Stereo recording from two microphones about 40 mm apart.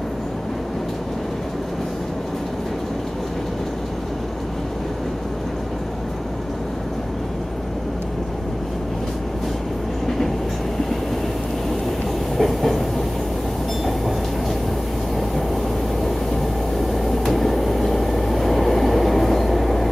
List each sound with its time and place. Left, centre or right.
12.4 s train: centre
16.9 s train: centre